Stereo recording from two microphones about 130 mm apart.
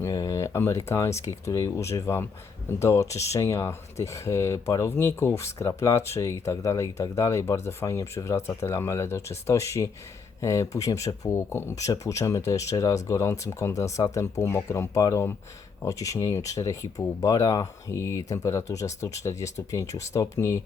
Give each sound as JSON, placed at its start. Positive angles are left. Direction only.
{"t": 0.0, "sound": "speech", "side_deg": 25}